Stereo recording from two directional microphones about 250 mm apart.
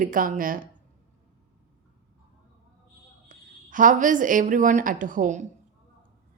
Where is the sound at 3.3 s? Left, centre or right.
Right.